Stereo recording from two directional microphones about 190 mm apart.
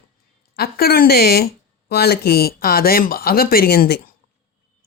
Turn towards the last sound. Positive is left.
turn(degrees=55)  # may be behind; listen again after turning